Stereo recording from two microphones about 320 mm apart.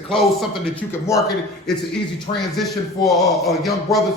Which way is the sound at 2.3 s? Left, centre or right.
Centre.